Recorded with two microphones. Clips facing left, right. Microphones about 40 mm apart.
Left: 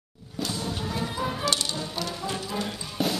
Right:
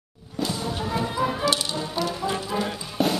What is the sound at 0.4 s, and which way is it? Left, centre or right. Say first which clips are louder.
Music: right 3 dB; centre.